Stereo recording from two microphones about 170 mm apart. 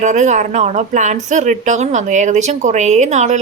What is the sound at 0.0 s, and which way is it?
A woman's voice, 45° right (ahead or behind).